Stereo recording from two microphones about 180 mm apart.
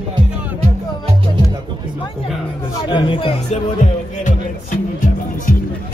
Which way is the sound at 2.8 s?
25° left (ahead or behind).